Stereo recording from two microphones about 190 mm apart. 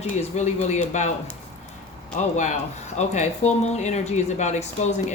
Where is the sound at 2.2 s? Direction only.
40° left (ahead or behind).